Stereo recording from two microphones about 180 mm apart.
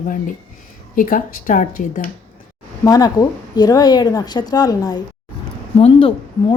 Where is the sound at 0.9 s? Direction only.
50° left (ahead or behind).